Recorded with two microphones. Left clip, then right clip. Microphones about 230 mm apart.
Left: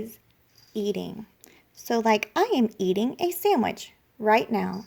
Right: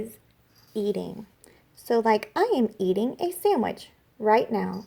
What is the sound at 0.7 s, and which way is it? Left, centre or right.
A woman's voice, left.